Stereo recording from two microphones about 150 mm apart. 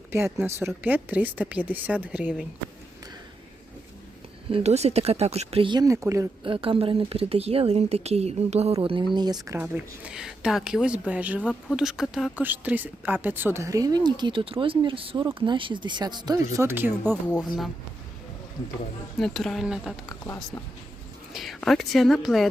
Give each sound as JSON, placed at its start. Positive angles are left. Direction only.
{"t": 0.1, "sound": "speech", "side_deg": -15}
{"t": 4.5, "sound": "speech", "side_deg": -45}
{"t": 5.7, "sound": "speech", "side_deg": -20}
{"t": 6.4, "sound": "a woman's voice", "side_deg": -35}
{"t": 16.6, "sound": "speech", "side_deg": -15}
{"t": 19.2, "sound": "a woman's voice", "side_deg": 0}
{"t": 20.1, "sound": "speech", "side_deg": 20}
{"t": 21.3, "sound": "a woman's voice", "side_deg": 0}